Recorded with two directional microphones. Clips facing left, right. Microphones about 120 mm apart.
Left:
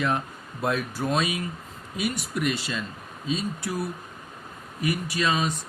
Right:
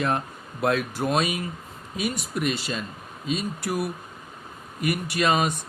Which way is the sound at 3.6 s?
75° right (ahead or behind).